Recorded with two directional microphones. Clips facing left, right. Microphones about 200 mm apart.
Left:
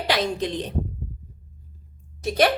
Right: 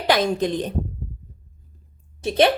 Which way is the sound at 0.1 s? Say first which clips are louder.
Right 5 dB; 50° right (ahead or behind).